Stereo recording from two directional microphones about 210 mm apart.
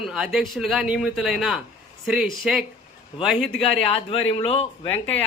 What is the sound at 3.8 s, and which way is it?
Speech, 25° left (ahead or behind).